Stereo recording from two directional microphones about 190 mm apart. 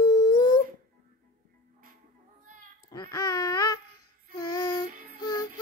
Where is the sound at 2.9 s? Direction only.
20° left (ahead or behind).